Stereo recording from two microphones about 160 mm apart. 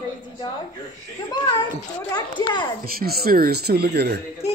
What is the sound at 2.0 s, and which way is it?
Children playing, 25° left (ahead or behind).